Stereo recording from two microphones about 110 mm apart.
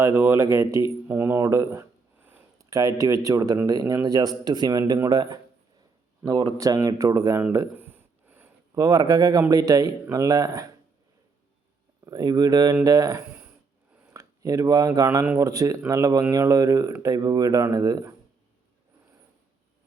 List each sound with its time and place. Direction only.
0.0 s speech: 25° right (ahead or behind)
6.6 s speech: 30° right (ahead or behind)
7.7 s a sound: 20° right (ahead or behind)
8.7 s speech: 35° right (ahead or behind)
12.0 s speech: 35° right (ahead or behind)